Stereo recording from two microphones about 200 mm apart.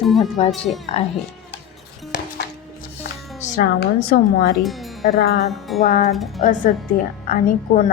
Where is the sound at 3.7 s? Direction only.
55° left (ahead or behind).